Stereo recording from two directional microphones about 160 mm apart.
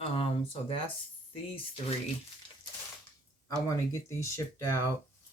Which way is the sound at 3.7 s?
15° left (ahead or behind).